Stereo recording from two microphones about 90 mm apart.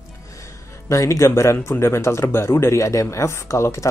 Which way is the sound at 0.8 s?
35° left (ahead or behind).